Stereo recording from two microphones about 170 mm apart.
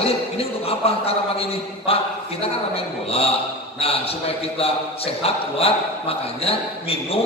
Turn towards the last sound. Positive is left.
turn(degrees=35)  # may be behind; listen again after turning